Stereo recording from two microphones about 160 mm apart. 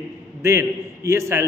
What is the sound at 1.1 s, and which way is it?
Speech, 15° right (ahead or behind).